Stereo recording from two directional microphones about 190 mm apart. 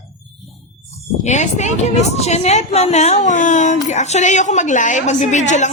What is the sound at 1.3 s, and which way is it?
A woman's voice, 40° left (ahead or behind).